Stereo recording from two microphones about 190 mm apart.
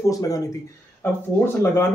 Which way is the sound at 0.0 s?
20° left (ahead or behind).